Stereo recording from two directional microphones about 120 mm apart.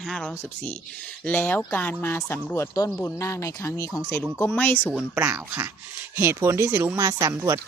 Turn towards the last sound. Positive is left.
turn(degrees=-25)  # may be behind; listen again after turning